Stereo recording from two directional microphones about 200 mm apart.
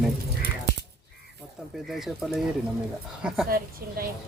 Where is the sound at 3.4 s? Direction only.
50° right (ahead or behind).